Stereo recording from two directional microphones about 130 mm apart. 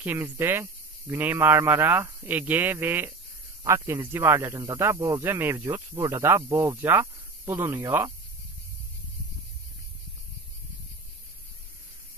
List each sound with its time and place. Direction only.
0.0 s speech: 15° right (ahead or behind)